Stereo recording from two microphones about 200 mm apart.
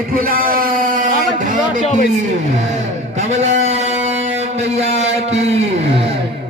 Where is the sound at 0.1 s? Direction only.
45° right (ahead or behind).